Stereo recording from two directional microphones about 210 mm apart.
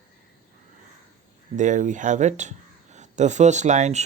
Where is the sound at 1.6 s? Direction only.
35° right (ahead or behind).